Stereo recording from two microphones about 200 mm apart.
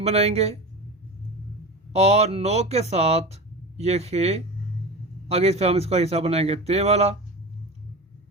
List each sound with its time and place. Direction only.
0.0 s speech: 30° right (ahead or behind)
1.9 s speech: 30° right (ahead or behind)